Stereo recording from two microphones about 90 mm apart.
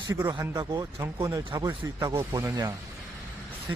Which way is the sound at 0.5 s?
45° right (ahead or behind).